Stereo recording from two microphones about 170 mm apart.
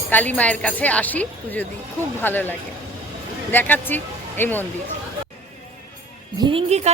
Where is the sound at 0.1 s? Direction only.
10° left (ahead or behind).